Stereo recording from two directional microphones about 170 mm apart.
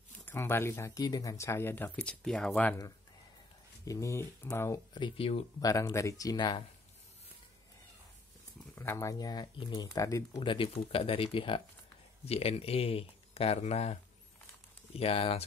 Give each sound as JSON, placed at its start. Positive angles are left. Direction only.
{"t": 0.2, "sound": "speech", "side_deg": 15}
{"t": 3.8, "sound": "speech", "side_deg": 20}
{"t": 5.6, "sound": "speech", "side_deg": 20}
{"t": 8.7, "sound": "speech", "side_deg": 15}
{"t": 15.0, "sound": "speech", "side_deg": 35}